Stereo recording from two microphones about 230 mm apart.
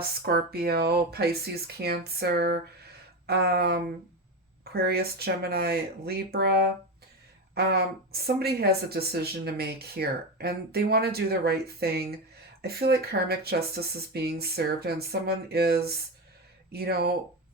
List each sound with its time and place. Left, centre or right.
0.0 s speech: right
16.7 s speech: right